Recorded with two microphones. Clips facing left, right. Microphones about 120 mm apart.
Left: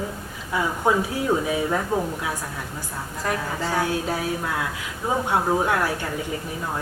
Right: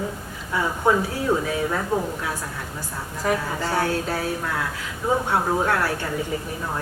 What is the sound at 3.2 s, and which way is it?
Speech, 5° right (ahead or behind).